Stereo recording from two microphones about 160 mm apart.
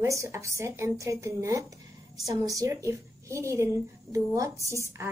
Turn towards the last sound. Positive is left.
turn(degrees=-15)  # may be behind; listen again after turning